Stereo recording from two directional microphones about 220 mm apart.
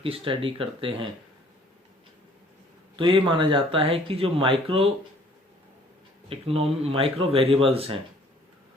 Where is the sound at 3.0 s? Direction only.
20° right (ahead or behind).